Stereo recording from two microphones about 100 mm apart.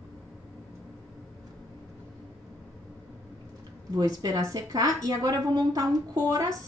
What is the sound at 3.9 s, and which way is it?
A woman's voice, 40° right (ahead or behind).